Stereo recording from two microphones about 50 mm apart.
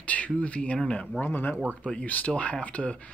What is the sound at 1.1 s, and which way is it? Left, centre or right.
Speech, left.